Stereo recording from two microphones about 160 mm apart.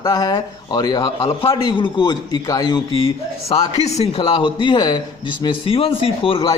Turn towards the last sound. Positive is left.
turn(degrees=35)  # may be behind; listen again after turning